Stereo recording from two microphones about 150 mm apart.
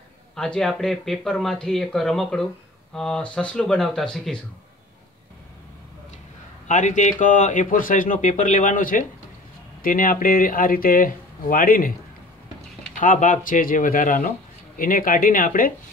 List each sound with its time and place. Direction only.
0.4 s speech: 5° left (ahead or behind)
6.7 s speech: 55° left (ahead or behind)
13.0 s speech: 60° left (ahead or behind)